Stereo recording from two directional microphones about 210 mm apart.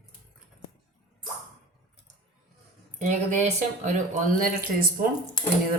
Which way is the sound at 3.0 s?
35° right (ahead or behind).